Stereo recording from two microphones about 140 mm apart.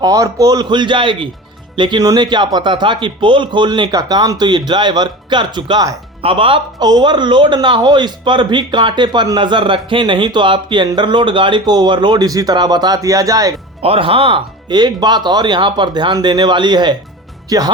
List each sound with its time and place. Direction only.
0.0 s a man's voice: 25° right (ahead or behind)
6.2 s a man's voice: 40° right (ahead or behind); by 13.5 s 25° right (ahead or behind)
13.8 s a man's voice: 40° right (ahead or behind); by 17.7 s 25° right (ahead or behind)